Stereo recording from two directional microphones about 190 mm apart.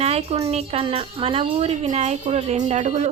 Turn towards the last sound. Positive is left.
turn(degrees=-35)  # may be behind; listen again after turning